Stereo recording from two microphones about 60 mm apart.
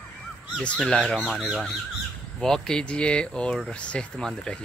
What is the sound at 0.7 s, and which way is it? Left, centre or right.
Speech, centre.